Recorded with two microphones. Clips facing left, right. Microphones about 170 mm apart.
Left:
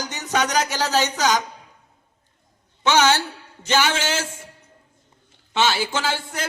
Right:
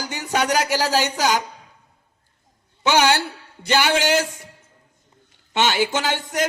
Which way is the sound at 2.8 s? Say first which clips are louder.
Even; 10° right (ahead or behind).